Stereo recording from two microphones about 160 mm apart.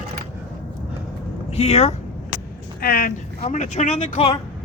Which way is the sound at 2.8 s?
65° left (ahead or behind).